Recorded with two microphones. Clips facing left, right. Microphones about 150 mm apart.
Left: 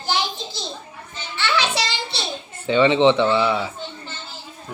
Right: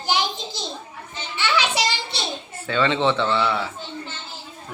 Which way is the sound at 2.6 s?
15° left (ahead or behind).